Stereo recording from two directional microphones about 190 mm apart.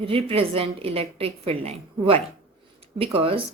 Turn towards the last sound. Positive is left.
turn(degrees=-30)  # may be behind; listen again after turning